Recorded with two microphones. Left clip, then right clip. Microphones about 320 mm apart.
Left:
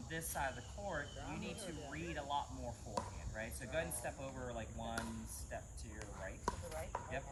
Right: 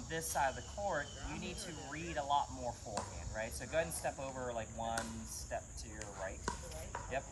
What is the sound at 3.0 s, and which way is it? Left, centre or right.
Speech, centre.